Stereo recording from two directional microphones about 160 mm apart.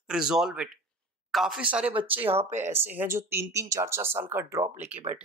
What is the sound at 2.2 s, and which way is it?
Speech, 45° right (ahead or behind).